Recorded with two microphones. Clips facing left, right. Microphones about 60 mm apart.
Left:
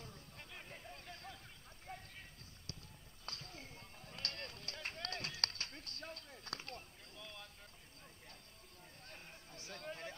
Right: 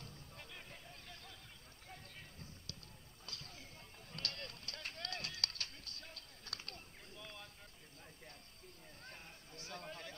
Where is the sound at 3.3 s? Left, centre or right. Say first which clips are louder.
Left 3 dB; left.